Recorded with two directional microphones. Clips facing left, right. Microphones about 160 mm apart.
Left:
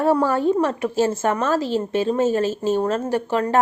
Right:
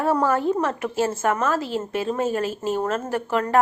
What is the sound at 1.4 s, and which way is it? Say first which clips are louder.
Speech: left 3 dB; 35° left (ahead or behind).